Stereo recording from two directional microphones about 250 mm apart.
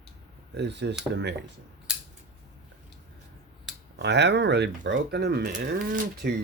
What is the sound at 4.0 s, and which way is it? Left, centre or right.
Speech, right.